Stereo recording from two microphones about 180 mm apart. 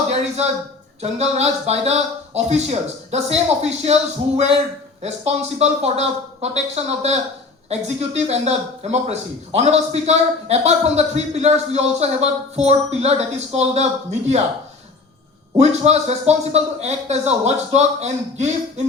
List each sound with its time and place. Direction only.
0.1 s a sound: 35° right (ahead or behind)
1.0 s speech: 35° right (ahead or behind)
5.0 s speech: 35° right (ahead or behind)
15.5 s speech: 35° right (ahead or behind)